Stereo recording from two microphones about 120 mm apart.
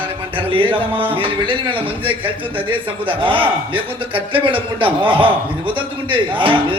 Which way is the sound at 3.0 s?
45° right (ahead or behind).